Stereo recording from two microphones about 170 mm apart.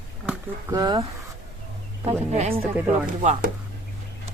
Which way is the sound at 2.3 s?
40° right (ahead or behind).